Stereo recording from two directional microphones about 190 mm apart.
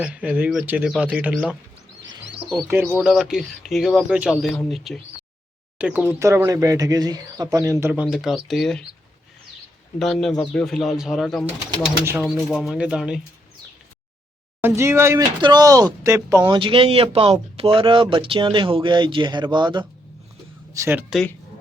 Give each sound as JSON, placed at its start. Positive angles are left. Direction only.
{"t": 0.0, "sound": "speech", "side_deg": -5}
{"t": 2.6, "sound": "speech", "side_deg": -10}
{"t": 10.0, "sound": "speech", "side_deg": 0}
{"t": 11.7, "sound": "speech", "side_deg": -15}
{"t": 12.2, "sound": "speech", "side_deg": 0}
{"t": 14.6, "sound": "speech", "side_deg": -15}